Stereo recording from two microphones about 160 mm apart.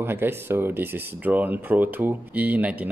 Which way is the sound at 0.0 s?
15° right (ahead or behind).